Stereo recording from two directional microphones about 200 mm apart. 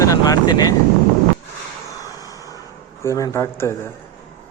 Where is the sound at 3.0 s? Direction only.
15° left (ahead or behind).